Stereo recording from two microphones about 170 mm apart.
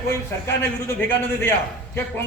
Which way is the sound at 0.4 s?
10° left (ahead or behind).